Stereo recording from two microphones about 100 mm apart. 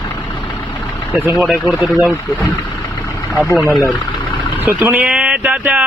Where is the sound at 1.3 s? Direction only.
5° right (ahead or behind).